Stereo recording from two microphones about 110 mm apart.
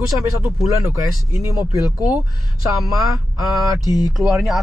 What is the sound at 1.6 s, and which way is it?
Speech, 35° left (ahead or behind).